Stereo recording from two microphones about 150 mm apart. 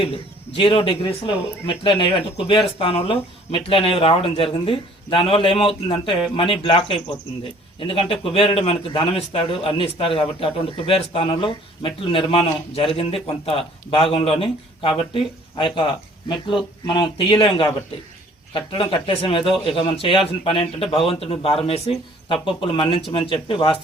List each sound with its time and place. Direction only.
0.0 s a man's voice: 40° left (ahead or behind)